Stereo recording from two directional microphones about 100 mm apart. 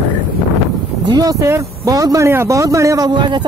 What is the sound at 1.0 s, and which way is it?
Speech, 40° right (ahead or behind).